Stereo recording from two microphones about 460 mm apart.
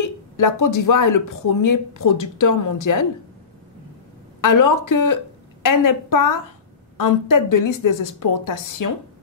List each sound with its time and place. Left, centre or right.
0.4 s speech: left
4.4 s a woman's voice: left